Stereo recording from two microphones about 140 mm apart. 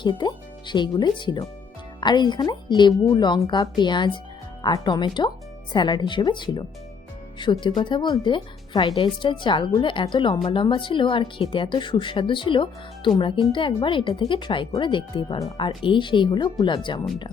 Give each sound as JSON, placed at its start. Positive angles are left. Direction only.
{"t": 0.0, "sound": "speech", "side_deg": 30}